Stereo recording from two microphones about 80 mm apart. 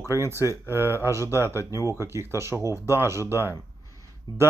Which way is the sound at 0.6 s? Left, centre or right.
Right.